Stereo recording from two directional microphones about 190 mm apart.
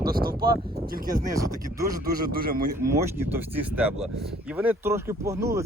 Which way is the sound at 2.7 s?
15° right (ahead or behind).